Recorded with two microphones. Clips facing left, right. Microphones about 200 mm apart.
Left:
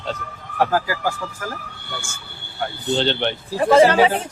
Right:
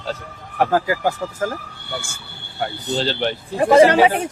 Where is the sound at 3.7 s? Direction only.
15° right (ahead or behind).